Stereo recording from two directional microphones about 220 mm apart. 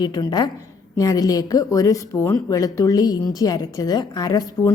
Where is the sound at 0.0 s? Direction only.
20° left (ahead or behind).